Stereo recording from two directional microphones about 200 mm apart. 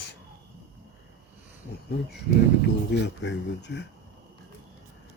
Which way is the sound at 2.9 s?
60° left (ahead or behind).